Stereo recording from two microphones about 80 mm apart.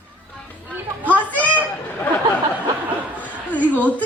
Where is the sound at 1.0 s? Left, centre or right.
Centre.